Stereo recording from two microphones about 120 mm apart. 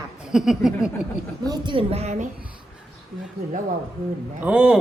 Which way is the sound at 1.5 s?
40° right (ahead or behind).